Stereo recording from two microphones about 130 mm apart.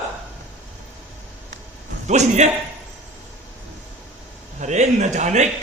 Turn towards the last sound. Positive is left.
turn(degrees=-65)  # may be behind; listen again after turning